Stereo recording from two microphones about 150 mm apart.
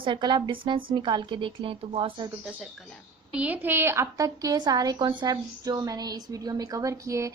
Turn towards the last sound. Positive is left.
turn(degrees=-20)  # may be behind; listen again after turning